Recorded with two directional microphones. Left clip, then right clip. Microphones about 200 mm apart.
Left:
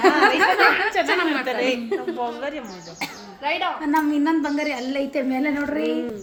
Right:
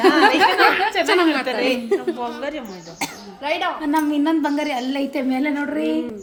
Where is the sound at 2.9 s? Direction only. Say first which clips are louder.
Right 3 dB; 65° right (ahead or behind).